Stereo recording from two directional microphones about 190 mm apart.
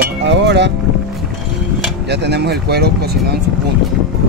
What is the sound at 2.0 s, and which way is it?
Speech, 60° right (ahead or behind).